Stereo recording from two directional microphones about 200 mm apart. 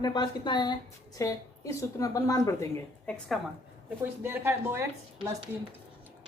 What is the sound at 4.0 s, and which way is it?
A woman's voice, 10° right (ahead or behind).